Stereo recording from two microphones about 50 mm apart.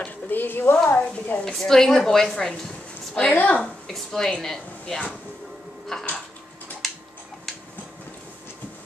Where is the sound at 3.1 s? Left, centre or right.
Centre.